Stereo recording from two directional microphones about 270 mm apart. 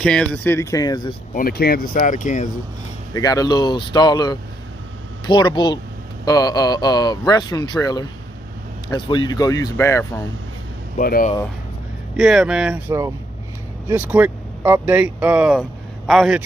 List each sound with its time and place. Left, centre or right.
0.0 s speech: centre
1.3 s speech: left
3.1 s speech: centre
11.0 s speech: left
12.2 s speech: centre